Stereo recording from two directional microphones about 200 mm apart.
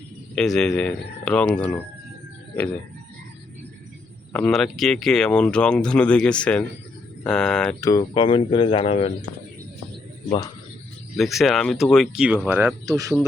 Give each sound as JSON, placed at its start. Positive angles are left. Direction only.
{"t": 0.3, "sound": "speech", "side_deg": 5}
{"t": 4.3, "sound": "speech", "side_deg": 5}
{"t": 7.8, "sound": "speech", "side_deg": 20}
{"t": 10.2, "sound": "speech", "side_deg": 20}
{"t": 11.2, "sound": "speech", "side_deg": 0}